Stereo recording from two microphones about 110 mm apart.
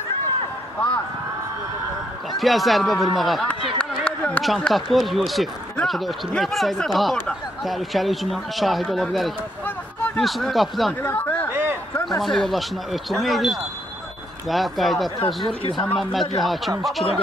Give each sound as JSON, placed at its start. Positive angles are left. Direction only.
{"t": 2.3, "sound": "speech", "side_deg": 0}
{"t": 3.7, "sound": "a sound", "side_deg": 10}
{"t": 4.9, "sound": "speech", "side_deg": 0}
{"t": 11.0, "sound": "speech", "side_deg": 15}
{"t": 12.2, "sound": "speech", "side_deg": 0}
{"t": 15.1, "sound": "speech", "side_deg": 50}
{"t": 16.0, "sound": "speech", "side_deg": 0}